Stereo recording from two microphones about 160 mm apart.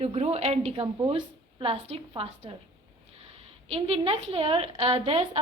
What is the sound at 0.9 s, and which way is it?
A woman's voice, 30° right (ahead or behind).